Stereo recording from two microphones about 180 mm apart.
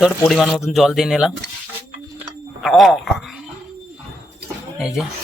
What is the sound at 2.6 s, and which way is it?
Speech, centre (ahead or behind).